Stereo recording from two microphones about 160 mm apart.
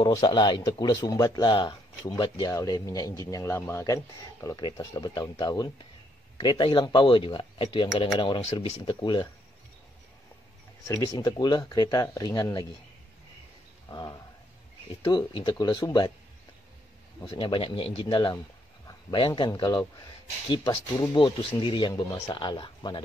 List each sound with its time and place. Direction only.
0.0 s speech: 25° left (ahead or behind)
10.9 s speech: 20° left (ahead or behind)
13.8 s speech: 25° left (ahead or behind)
17.2 s speech: 35° left (ahead or behind)